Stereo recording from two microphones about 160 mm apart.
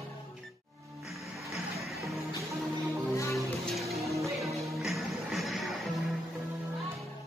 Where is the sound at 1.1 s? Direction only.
Centre (ahead or behind).